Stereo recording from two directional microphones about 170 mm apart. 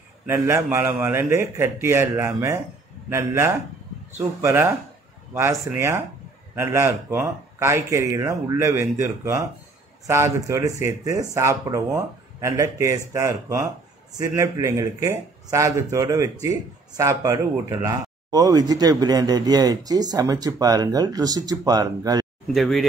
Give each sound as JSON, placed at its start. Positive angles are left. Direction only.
{"t": 0.3, "sound": "speech", "side_deg": -15}
{"t": 22.5, "sound": "speech", "side_deg": 0}